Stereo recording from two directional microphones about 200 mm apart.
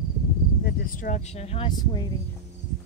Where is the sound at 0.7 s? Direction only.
45° left (ahead or behind).